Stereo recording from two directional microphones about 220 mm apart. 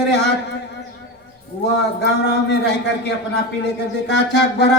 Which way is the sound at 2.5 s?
50° left (ahead or behind).